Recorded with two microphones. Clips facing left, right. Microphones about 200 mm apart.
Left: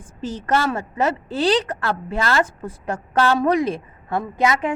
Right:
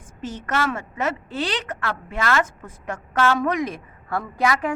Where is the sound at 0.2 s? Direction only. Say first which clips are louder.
Left 4 dB; 35° left (ahead or behind).